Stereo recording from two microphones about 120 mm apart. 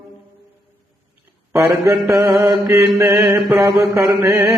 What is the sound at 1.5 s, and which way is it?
Mantra, 25° right (ahead or behind).